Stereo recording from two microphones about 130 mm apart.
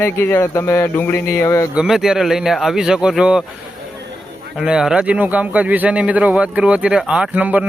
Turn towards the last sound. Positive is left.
turn(degrees=-10)  # may be behind; listen again after turning